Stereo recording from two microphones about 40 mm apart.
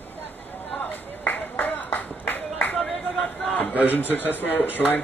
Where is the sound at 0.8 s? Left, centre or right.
Left.